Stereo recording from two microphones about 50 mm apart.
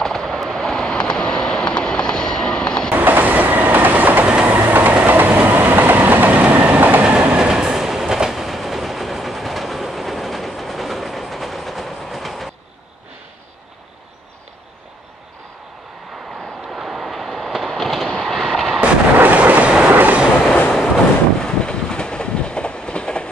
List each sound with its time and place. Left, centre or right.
0.0 s vehicle: centre
2.9 s train: right
7.1 s train: centre
16.7 s train: centre
18.0 s vehicle: centre
18.5 s artillery fire: centre
19.1 s train: right
20.4 s train: left
21.4 s train: centre